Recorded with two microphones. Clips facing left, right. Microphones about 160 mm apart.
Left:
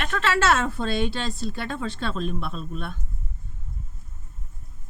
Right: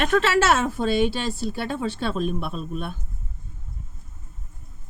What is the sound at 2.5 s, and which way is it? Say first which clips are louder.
Speech: right 3 dB; 10° right (ahead or behind).